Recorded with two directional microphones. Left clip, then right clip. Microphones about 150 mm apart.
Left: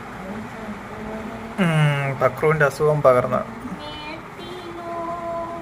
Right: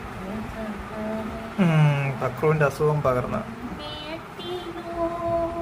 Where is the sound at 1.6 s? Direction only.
25° left (ahead or behind).